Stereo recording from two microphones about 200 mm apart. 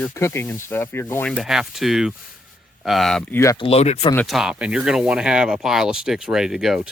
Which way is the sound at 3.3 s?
15° left (ahead or behind).